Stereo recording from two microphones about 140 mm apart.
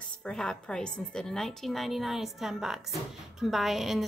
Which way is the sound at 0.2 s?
5° left (ahead or behind).